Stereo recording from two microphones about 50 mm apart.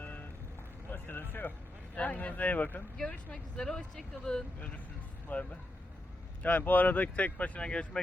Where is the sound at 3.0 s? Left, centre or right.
Centre.